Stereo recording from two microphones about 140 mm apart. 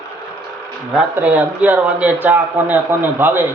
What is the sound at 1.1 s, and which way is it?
Speech, 10° right (ahead or behind).